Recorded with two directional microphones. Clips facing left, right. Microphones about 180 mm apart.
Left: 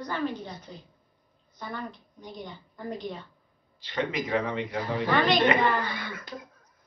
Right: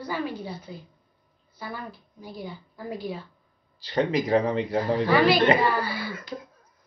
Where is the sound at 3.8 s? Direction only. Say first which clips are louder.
Right 6 dB; 35° right (ahead or behind).